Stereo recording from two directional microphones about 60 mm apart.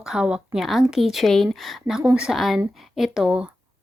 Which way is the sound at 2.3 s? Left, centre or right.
Centre.